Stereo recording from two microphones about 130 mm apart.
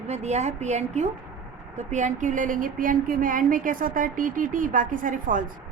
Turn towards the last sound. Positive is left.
turn(degrees=-90)